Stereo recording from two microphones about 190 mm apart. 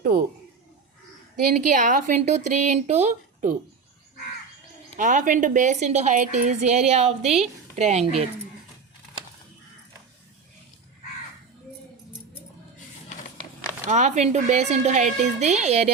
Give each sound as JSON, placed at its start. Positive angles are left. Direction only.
{"t": 1.5, "sound": "speech", "side_deg": -40}
{"t": 4.9, "sound": "speech", "side_deg": -45}
{"t": 13.8, "sound": "speech", "side_deg": -40}